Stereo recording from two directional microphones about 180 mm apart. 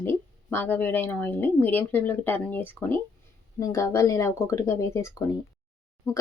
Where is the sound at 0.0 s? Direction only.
10° left (ahead or behind).